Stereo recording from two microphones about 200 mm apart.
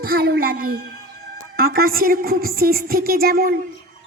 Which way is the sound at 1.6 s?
45° right (ahead or behind).